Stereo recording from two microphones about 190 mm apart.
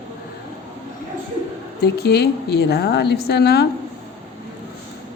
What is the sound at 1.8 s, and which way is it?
A woman's voice, 60° left (ahead or behind).